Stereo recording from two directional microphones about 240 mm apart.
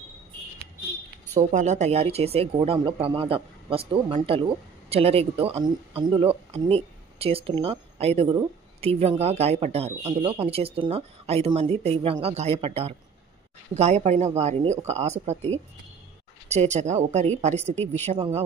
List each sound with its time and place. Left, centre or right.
1.3 s speech: right